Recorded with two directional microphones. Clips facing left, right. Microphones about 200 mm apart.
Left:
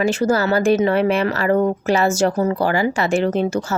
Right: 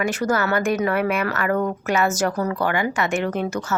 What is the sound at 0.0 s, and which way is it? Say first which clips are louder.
Speech: left 4 dB; 25° left (ahead or behind).